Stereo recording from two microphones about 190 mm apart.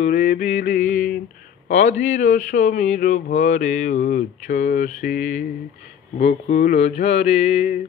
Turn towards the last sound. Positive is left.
turn(degrees=35)  # may be behind; listen again after turning